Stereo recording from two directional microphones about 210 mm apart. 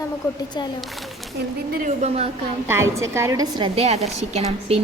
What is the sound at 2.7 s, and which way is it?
A woman's voice, 15° right (ahead or behind).